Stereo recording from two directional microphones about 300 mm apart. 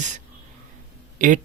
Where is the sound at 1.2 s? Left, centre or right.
Right.